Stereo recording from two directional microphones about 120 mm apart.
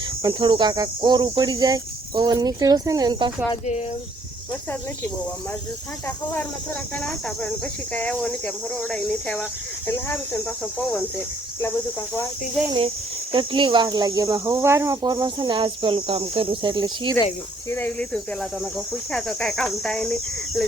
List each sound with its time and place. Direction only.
0.2 s speech: 25° right (ahead or behind)
0.4 s speech: 40° right (ahead or behind)
6.9 s speech: 5° left (ahead or behind)
13.3 s speech: 45° right (ahead or behind)
17.7 s speech: 20° left (ahead or behind)
19.1 s speech: 5° left (ahead or behind)